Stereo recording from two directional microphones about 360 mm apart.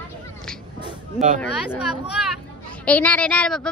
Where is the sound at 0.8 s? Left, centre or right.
Centre.